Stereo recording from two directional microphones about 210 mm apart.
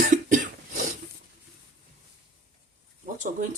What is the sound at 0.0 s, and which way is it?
Cough, 40° right (ahead or behind).